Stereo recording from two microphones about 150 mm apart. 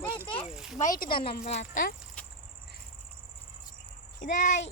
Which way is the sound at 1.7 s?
70° left (ahead or behind).